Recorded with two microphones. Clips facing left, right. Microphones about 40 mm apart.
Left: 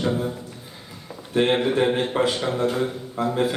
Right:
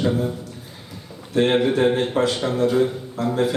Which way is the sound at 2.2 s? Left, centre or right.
Left.